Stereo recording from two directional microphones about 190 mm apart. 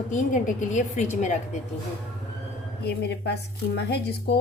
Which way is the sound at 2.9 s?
60° left (ahead or behind).